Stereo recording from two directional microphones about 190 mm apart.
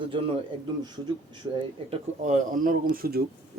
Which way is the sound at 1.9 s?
40° right (ahead or behind).